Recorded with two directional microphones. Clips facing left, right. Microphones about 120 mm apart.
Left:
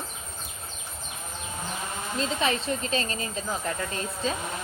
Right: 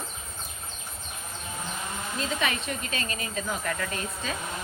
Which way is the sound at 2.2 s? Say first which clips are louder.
Left 3 dB; 30° left (ahead or behind).